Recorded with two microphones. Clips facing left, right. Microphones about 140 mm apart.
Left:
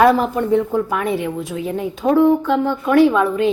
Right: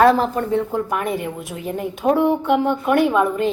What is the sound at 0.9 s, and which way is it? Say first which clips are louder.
A woman's voice: left 2 dB; 5° right (ahead or behind).